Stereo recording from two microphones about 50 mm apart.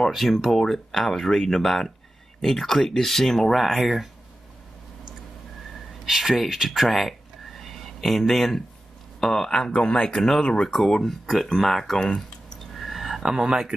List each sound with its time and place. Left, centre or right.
0.1 s speech: centre
6.0 s speech: centre
12.7 s a sound: centre
13.2 s speech: centre